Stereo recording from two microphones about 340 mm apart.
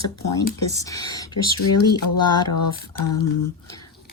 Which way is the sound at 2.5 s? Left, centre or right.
Left.